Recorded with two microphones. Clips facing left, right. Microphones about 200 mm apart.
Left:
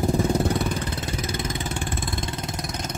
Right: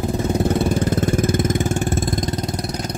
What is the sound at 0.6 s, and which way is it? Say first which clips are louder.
Vehicle: right 9 dB; 45° right (ahead or behind).